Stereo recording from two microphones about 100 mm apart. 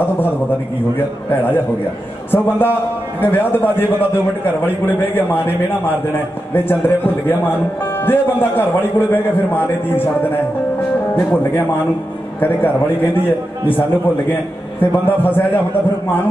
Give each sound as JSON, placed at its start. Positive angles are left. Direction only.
{"t": 0.9, "sound": "a man's voice", "side_deg": 20}
{"t": 11.1, "sound": "a man's voice", "side_deg": 20}
{"t": 13.7, "sound": "a man's voice", "side_deg": 20}